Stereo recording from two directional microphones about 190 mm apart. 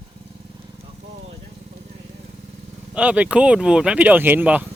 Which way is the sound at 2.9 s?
5° right (ahead or behind).